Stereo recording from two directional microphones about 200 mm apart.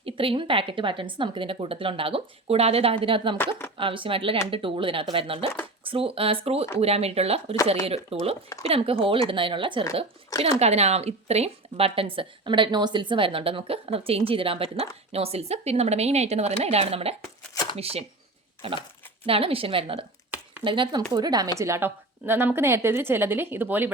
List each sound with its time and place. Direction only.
0.0 s a woman's voice: 25° right (ahead or behind)
3.3 s speech: 10° left (ahead or behind)
3.8 s a woman's voice: 25° right (ahead or behind)
17.5 s shuffling cards: 20° left (ahead or behind)
17.7 s a woman's voice: 30° right (ahead or behind); by 23.9 s 10° right (ahead or behind)